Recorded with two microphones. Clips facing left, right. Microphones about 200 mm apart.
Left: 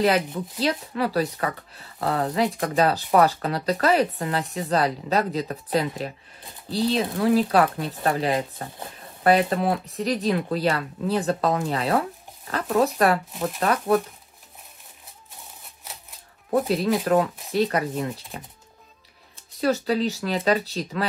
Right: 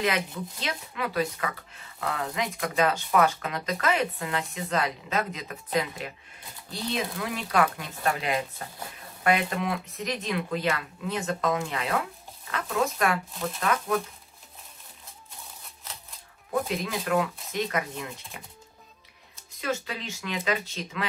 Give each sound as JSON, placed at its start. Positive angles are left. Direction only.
{"t": 0.0, "sound": "speech", "side_deg": 35}
{"t": 16.5, "sound": "speech", "side_deg": 35}
{"t": 19.6, "sound": "speech", "side_deg": 35}